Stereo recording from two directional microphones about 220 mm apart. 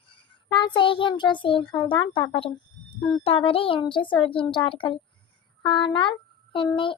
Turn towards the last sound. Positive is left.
turn(degrees=25)  # may be behind; listen again after turning